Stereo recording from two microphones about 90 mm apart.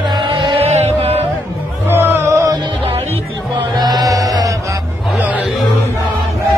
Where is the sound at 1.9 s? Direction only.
25° right (ahead or behind).